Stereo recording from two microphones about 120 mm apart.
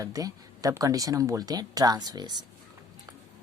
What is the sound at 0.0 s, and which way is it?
A woman's voice, 30° right (ahead or behind).